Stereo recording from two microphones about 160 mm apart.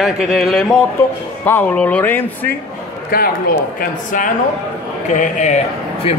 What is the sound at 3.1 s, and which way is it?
Speech, 65° left (ahead or behind).